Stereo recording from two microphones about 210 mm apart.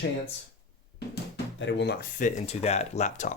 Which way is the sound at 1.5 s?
55° left (ahead or behind).